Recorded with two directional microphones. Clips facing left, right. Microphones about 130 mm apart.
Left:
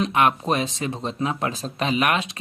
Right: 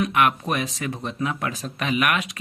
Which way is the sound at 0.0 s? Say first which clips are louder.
Left 1 dB; 25° left (ahead or behind).